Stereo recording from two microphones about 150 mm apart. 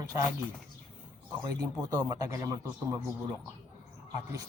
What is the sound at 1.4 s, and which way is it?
A man's voice, 25° right (ahead or behind).